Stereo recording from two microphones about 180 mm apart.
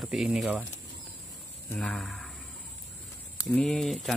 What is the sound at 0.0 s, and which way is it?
Speech, 5° right (ahead or behind).